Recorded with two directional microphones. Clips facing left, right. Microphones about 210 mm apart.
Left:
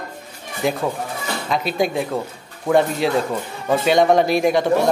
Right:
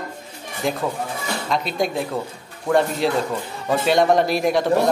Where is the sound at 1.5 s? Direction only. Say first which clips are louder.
Left 2 dB; centre (ahead or behind).